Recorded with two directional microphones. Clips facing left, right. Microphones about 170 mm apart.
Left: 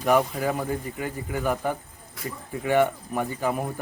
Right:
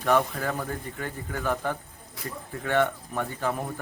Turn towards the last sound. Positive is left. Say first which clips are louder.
# left 3 dB
turn(degrees=10)  # may be behind; listen again after turning